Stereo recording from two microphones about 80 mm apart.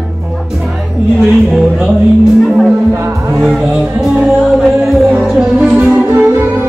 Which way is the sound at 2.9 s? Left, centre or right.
Right.